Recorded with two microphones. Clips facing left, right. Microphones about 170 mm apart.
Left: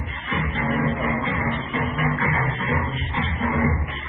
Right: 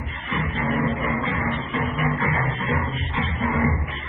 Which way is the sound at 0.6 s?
Centre (ahead or behind).